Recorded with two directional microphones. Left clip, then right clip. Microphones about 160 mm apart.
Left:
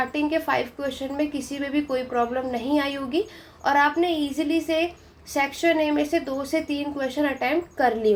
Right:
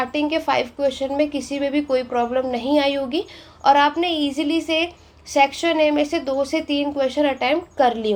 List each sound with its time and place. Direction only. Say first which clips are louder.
0.0 s a woman's voice: right 3 dB; 35° right (ahead or behind)